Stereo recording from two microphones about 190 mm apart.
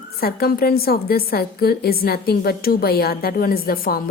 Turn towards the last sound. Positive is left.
turn(degrees=50)  # may be behind; listen again after turning